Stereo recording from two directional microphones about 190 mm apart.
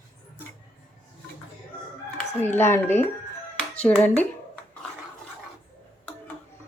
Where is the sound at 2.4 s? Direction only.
10° left (ahead or behind).